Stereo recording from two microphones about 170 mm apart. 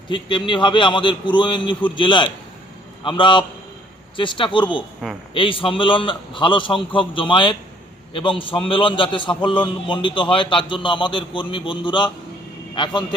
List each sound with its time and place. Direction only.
0.1 s a man's voice: 30° left (ahead or behind)